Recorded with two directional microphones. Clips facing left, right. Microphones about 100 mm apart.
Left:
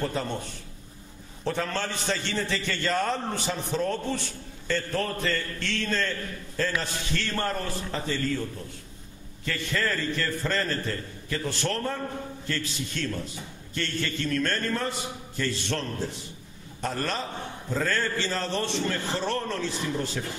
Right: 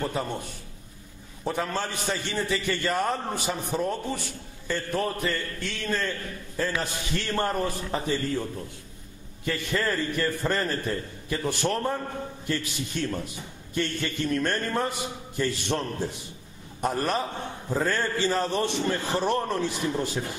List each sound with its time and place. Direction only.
0.0 s a man's voice: 15° right (ahead or behind)
1.4 s a man's voice: 15° right (ahead or behind)